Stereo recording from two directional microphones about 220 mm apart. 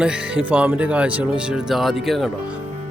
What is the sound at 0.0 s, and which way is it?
Speech, 5° right (ahead or behind).